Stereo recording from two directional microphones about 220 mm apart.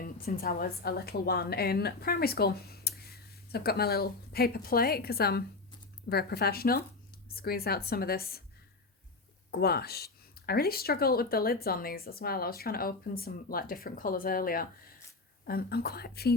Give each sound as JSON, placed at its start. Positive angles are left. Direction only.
{"t": 0.0, "sound": "a woman's voice", "side_deg": 40}
{"t": 9.5, "sound": "a woman's voice", "side_deg": 45}